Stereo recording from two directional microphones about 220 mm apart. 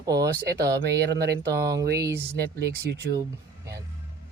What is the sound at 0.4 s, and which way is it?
Speech, 45° right (ahead or behind).